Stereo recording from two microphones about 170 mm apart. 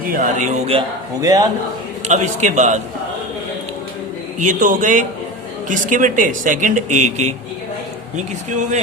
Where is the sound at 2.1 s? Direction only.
45° right (ahead or behind).